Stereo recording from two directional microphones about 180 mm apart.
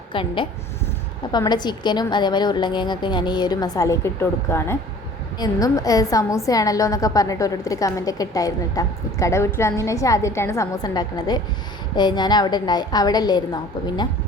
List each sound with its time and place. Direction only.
0.1 s a woman's voice: 30° left (ahead or behind)